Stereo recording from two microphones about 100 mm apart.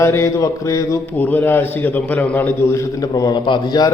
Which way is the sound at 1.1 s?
15° left (ahead or behind).